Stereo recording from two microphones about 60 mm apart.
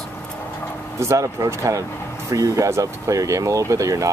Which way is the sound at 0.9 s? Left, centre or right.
Right.